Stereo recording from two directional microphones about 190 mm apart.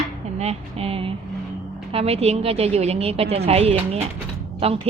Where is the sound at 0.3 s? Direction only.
30° right (ahead or behind).